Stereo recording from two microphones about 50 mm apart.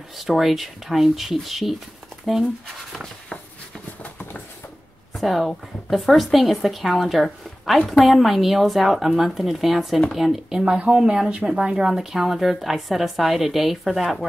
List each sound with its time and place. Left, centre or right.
0.2 s a woman's voice: centre
4.0 s clip-clop: left
5.1 s a woman's voice: centre